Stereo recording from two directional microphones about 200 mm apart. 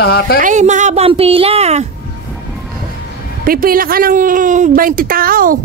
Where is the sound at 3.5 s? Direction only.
45° right (ahead or behind).